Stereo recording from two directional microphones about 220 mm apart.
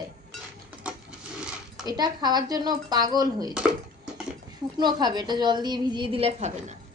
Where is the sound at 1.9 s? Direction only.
20° right (ahead or behind).